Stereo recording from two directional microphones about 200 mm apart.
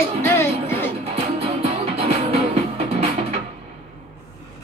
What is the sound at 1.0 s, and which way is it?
Music, 30° right (ahead or behind).